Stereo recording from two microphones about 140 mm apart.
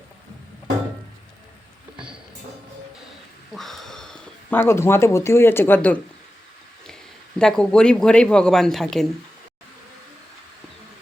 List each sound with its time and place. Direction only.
3.5 s a sound: centre (ahead or behind)
4.5 s speech: 15° left (ahead or behind)
7.3 s speech: 5° left (ahead or behind)